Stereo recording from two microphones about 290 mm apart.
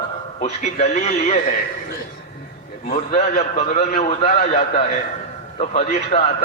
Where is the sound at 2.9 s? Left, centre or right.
Left.